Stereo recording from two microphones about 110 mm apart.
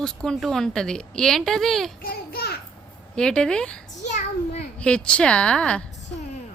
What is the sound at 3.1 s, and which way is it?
Speech, 5° left (ahead or behind).